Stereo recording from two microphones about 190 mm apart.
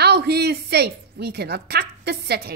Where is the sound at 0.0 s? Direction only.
60° right (ahead or behind).